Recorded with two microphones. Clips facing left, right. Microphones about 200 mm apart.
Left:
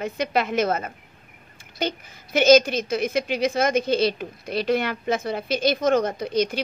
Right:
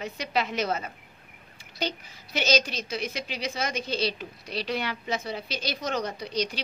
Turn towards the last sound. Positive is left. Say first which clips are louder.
# left 7 dB
turn(degrees=50)  # may be behind; listen again after turning